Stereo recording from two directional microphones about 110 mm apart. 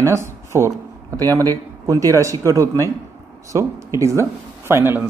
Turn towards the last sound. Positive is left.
turn(degrees=-20)  # may be behind; listen again after turning